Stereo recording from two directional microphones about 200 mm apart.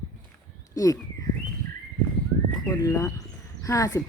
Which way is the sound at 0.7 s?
15° left (ahead or behind).